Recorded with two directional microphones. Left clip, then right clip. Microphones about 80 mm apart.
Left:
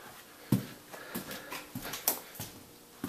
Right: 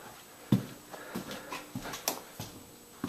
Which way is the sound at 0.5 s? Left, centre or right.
Left.